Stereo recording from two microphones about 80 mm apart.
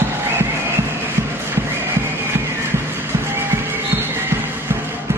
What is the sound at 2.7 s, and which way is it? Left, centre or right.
Music, right.